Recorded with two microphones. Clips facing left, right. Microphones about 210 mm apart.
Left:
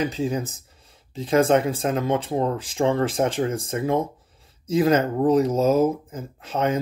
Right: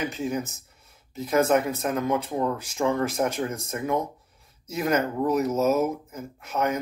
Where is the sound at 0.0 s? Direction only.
35° left (ahead or behind).